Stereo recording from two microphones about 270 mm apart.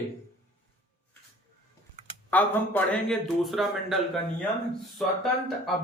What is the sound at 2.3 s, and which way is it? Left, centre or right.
A man's voice, centre.